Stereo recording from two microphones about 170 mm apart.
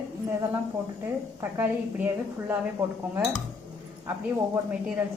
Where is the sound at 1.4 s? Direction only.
15° right (ahead or behind).